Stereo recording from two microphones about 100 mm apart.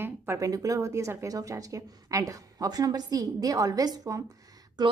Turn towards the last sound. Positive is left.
turn(degrees=-45)  # may be behind; listen again after turning